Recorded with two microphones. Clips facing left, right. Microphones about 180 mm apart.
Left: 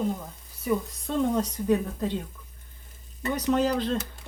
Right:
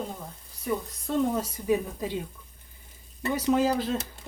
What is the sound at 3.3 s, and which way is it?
Speech, 10° right (ahead or behind).